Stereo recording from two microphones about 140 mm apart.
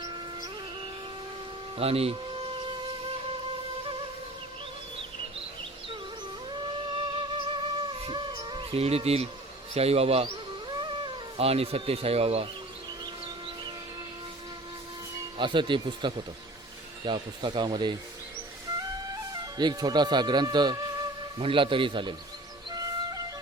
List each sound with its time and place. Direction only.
1.8 s music: 45° right (ahead or behind)
6.5 s music: 35° right (ahead or behind)
9.7 s speech: 45° right (ahead or behind)
10.8 s speech: 35° right (ahead or behind)
15.4 s speech: 35° right (ahead or behind)
19.3 s speech: 30° right (ahead or behind)
22.7 s flute: 25° right (ahead or behind)